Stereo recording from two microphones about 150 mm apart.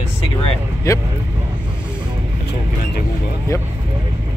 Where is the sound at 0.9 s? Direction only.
20° left (ahead or behind).